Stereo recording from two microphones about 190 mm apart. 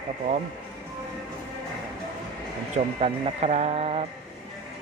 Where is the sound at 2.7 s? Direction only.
35° right (ahead or behind).